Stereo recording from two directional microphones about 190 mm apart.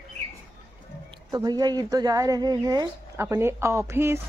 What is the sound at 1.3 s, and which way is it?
Speech, 20° right (ahead or behind).